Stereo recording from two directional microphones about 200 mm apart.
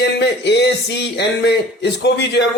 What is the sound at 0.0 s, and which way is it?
A man's voice, 55° left (ahead or behind).